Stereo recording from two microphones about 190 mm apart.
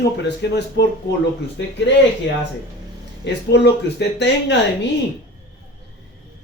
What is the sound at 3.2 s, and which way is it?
Speech, 65° left (ahead or behind).